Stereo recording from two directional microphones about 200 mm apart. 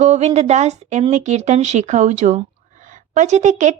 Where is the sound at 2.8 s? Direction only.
40° right (ahead or behind).